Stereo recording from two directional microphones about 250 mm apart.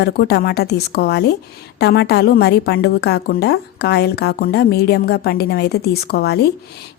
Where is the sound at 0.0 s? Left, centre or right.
Left.